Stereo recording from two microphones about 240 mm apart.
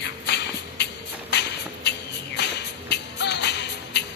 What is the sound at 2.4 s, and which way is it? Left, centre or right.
Music, left.